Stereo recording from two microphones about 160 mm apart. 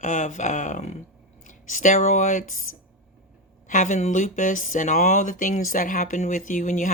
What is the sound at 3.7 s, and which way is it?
Speech, 50° left (ahead or behind).